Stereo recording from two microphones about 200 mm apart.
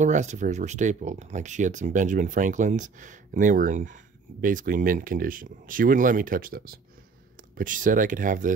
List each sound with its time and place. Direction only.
0.0 s speech: 35° right (ahead or behind)